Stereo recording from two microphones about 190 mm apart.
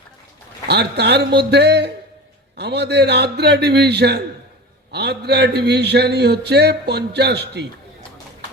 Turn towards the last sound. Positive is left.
turn(degrees=-60)  # may be behind; listen again after turning